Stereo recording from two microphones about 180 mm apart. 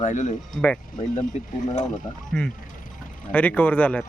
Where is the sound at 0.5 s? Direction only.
5° left (ahead or behind).